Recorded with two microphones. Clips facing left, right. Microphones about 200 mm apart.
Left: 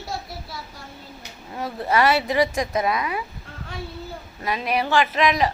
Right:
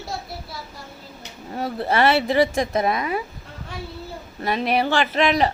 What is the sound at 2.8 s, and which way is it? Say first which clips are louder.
Speech: right 2 dB; 40° right (ahead or behind).